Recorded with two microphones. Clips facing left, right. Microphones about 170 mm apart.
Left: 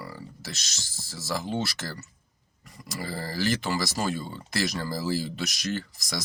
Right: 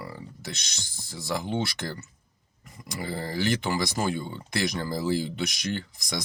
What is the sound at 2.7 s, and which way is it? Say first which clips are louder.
Speech: right 1 dB; centre (ahead or behind).